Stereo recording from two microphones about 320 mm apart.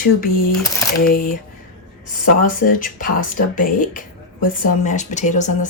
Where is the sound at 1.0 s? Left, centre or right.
Left.